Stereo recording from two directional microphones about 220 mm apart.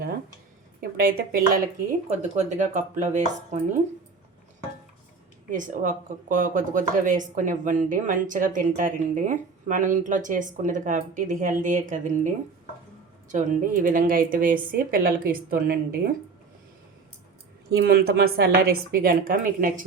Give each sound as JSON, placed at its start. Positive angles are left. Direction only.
{"t": 0.8, "sound": "speech", "side_deg": -40}
{"t": 5.5, "sound": "speech", "side_deg": -35}
{"t": 13.3, "sound": "speech", "side_deg": -35}
{"t": 17.7, "sound": "speech", "side_deg": -45}